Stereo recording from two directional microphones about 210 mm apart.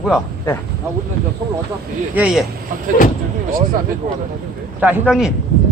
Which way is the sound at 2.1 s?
5° right (ahead or behind).